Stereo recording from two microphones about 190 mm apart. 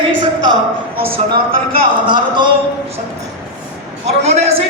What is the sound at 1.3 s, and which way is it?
Speech, 50° right (ahead or behind).